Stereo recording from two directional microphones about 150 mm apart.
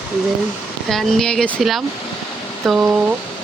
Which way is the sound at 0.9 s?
Centre (ahead or behind).